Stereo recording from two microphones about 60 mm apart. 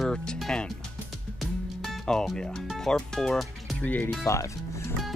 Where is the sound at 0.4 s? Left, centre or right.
Centre.